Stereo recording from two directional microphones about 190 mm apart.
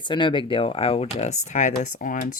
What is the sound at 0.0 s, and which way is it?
Speech, 25° left (ahead or behind).